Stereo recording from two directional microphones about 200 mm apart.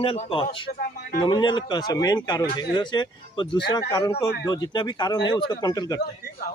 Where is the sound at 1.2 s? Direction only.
20° left (ahead or behind).